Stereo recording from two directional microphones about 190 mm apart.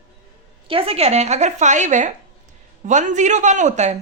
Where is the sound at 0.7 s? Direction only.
30° right (ahead or behind).